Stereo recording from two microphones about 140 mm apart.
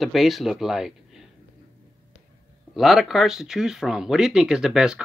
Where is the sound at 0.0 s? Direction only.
Centre (ahead or behind).